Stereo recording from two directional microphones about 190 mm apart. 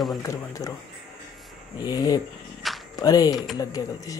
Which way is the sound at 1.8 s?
20° left (ahead or behind).